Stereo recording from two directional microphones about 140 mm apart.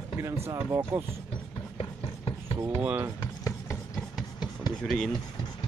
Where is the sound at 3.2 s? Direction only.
20° left (ahead or behind).